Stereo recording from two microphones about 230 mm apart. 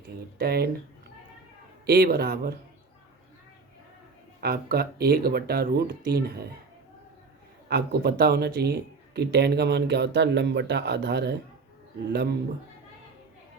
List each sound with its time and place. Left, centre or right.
0.3 s speech: right
1.9 s a man's voice: right
4.4 s speech: right
7.7 s speech: right